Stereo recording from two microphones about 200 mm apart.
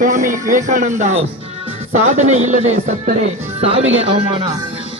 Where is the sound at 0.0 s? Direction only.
40° right (ahead or behind).